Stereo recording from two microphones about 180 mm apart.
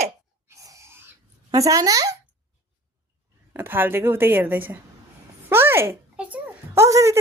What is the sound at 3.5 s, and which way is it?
A woman's voice, 10° right (ahead or behind).